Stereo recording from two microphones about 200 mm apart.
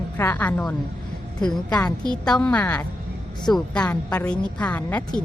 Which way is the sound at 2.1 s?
5° left (ahead or behind).